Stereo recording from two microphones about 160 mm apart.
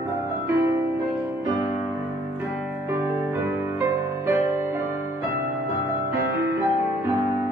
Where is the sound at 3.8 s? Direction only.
15° right (ahead or behind).